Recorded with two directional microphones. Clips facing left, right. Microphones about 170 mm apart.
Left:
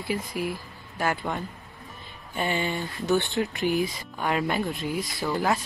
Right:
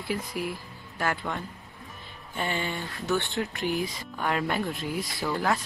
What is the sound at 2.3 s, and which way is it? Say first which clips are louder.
Speech: left 3 dB; 15° left (ahead or behind).